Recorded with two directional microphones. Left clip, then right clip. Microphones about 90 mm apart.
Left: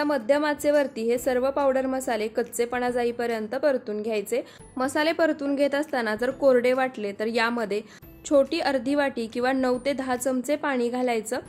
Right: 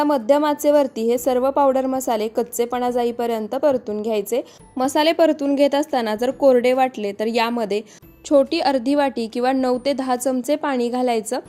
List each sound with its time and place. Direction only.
0.0 s a woman's voice: 35° right (ahead or behind)